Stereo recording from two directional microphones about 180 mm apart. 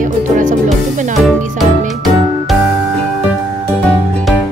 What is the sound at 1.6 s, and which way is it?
Music, centre (ahead or behind).